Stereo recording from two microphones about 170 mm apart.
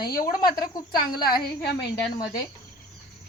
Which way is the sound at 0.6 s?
25° left (ahead or behind).